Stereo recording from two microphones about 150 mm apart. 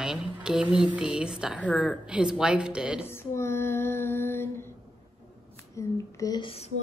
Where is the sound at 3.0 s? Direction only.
15° left (ahead or behind).